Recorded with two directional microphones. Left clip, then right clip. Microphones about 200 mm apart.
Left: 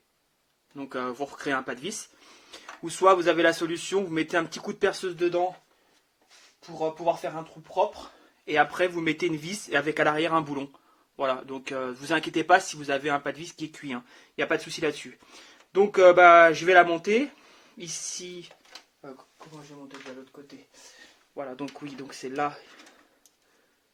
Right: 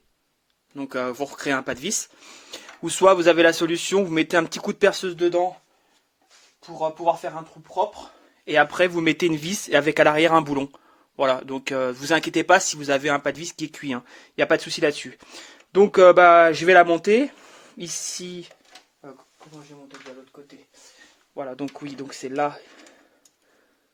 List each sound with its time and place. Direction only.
0.8 s speech: 40° right (ahead or behind)
6.7 s speech: 30° right (ahead or behind)
8.4 s speech: 45° right (ahead or behind)
21.3 s speech: 35° right (ahead or behind)